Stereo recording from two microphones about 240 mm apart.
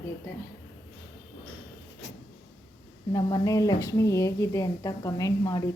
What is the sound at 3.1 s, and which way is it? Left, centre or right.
A woman's voice, centre.